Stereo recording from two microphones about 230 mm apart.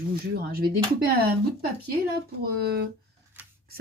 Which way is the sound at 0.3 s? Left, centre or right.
Right.